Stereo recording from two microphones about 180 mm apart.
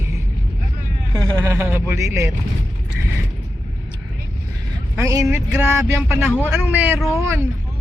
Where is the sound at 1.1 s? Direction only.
15° right (ahead or behind).